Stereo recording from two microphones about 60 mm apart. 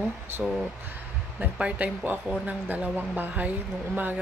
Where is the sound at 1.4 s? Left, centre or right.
Right.